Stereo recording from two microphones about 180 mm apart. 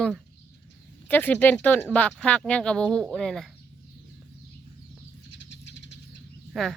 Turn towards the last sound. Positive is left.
turn(degrees=0)  # may be behind; listen again after turning